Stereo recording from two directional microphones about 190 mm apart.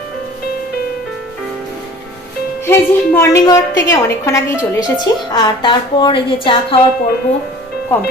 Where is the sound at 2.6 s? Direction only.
10° left (ahead or behind).